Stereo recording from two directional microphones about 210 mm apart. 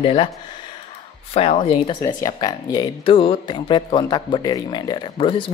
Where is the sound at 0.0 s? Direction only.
25° left (ahead or behind).